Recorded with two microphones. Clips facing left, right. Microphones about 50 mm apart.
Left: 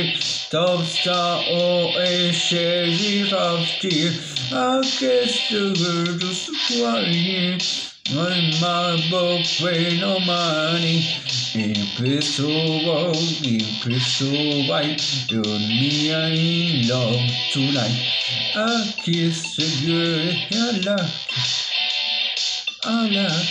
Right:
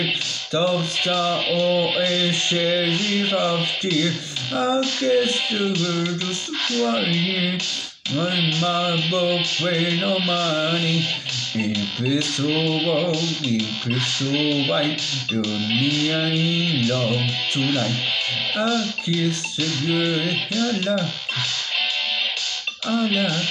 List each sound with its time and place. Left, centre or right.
0.6 s music: centre
1.6 s music: centre
2.9 s music: centre
4.6 s music: centre
5.7 s music: centre
7.0 s music: centre
8.6 s music: centre
12.2 s music: centre
15.9 s music: centre
16.4 s music: centre
22.9 s music: centre